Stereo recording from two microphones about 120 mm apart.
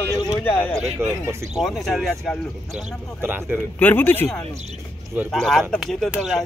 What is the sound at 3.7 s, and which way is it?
Speech, 15° left (ahead or behind).